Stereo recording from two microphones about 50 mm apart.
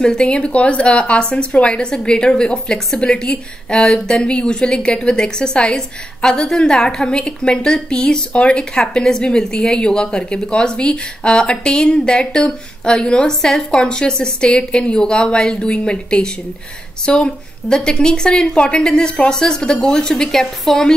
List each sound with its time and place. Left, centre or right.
0.0 s a woman's voice: centre
8.3 s a woman's voice: left